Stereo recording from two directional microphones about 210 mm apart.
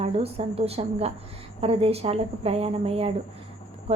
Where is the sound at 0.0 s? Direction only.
30° right (ahead or behind).